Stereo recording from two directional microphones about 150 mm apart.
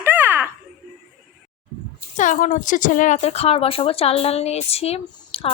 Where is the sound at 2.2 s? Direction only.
55° left (ahead or behind).